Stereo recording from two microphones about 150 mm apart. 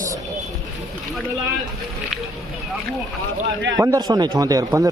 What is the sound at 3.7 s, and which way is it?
Speech, 25° right (ahead or behind).